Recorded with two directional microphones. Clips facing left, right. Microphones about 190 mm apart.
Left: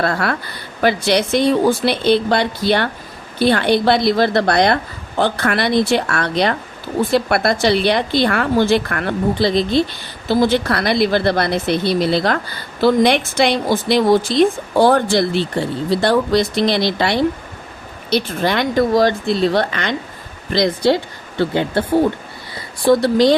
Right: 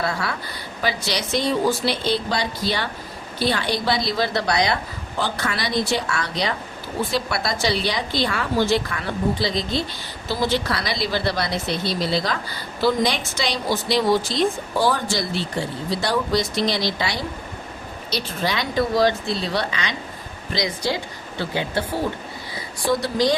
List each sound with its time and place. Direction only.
0.0 s speech: 60° left (ahead or behind)
22.9 s speech: 60° left (ahead or behind)